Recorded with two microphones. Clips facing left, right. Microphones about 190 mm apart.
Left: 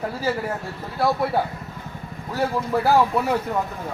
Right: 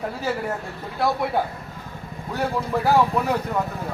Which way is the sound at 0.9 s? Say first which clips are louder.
Left 1 dB; centre (ahead or behind).